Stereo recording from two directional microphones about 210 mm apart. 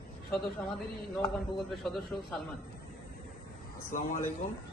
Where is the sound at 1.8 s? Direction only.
Centre (ahead or behind).